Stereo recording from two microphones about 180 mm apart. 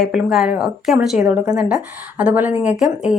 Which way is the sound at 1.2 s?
20° right (ahead or behind).